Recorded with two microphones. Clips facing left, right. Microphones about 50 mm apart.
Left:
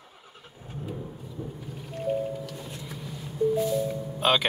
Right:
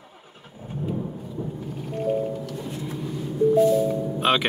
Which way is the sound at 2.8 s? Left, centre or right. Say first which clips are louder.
Right 8 dB; centre.